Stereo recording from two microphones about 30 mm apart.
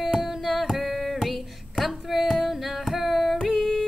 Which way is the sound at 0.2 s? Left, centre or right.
Centre.